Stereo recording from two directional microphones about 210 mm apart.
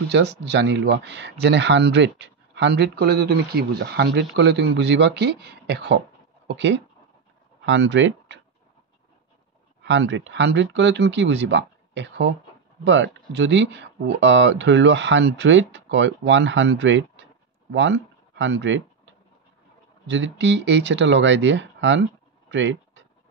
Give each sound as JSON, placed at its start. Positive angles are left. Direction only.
{"t": 0.1, "sound": "speech", "side_deg": -55}
{"t": 9.8, "sound": "speech", "side_deg": -60}
{"t": 20.1, "sound": "speech", "side_deg": -60}
{"t": 22.5, "sound": "a sound", "side_deg": -60}